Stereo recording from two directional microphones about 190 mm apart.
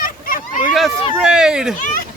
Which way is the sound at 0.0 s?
45° left (ahead or behind).